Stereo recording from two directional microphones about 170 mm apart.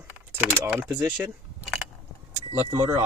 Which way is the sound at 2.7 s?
15° right (ahead or behind).